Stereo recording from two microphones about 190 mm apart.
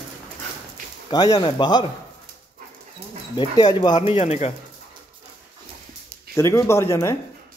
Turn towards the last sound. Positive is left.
turn(degrees=15)  # may be behind; listen again after turning